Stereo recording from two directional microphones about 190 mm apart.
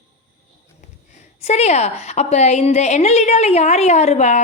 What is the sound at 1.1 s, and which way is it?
A woman's voice, 40° left (ahead or behind).